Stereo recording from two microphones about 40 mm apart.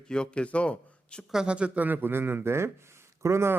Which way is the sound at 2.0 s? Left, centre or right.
Right.